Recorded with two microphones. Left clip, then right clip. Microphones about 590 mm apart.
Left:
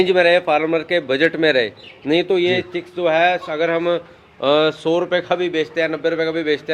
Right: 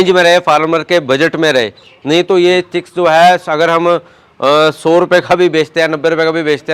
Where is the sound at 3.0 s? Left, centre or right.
Right.